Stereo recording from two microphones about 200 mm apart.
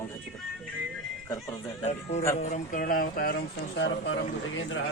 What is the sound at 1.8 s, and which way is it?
Music, 35° left (ahead or behind).